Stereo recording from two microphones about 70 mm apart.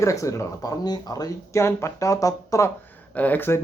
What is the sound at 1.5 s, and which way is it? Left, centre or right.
Speech, left.